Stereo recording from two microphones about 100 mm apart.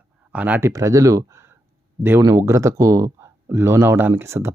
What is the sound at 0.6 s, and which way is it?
Speech, 30° right (ahead or behind).